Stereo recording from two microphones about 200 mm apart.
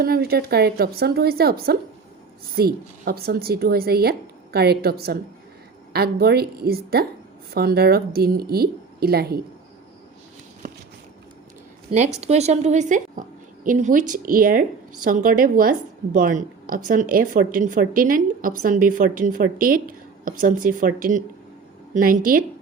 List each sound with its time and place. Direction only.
0.0 s a woman's voice: 50° right (ahead or behind)
10.6 s a sound: 40° right (ahead or behind)
11.9 s a woman's voice: 35° right (ahead or behind)